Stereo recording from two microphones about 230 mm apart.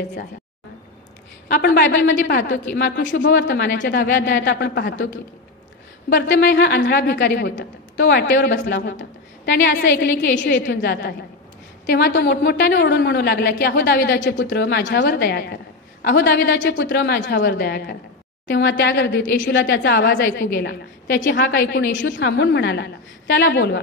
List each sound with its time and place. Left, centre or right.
1.5 s a woman's voice: left
6.0 s a woman's voice: left